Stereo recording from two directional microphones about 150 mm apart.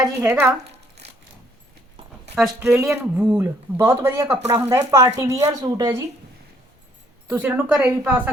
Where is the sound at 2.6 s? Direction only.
15° right (ahead or behind).